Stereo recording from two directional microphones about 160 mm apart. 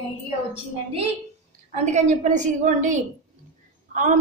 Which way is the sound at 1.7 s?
50° right (ahead or behind).